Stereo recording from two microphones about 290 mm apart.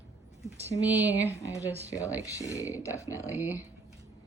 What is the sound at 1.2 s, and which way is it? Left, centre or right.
Speech, centre.